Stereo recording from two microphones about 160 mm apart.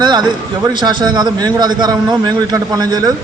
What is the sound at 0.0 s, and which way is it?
A man's voice, 25° right (ahead or behind).